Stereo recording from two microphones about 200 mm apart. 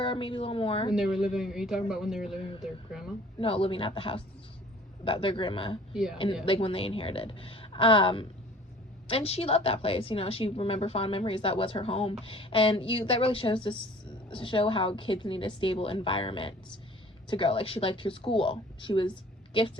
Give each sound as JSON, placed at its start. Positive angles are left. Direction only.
{"t": 0.0, "sound": "a woman's voice", "side_deg": 25}
{"t": 0.9, "sound": "speech", "side_deg": 0}
{"t": 3.4, "sound": "a woman's voice", "side_deg": 30}
{"t": 5.9, "sound": "speech", "side_deg": 0}
{"t": 6.4, "sound": "a woman's voice", "side_deg": 25}